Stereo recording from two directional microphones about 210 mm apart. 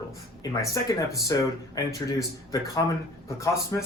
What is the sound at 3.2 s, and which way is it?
Speech, 15° left (ahead or behind).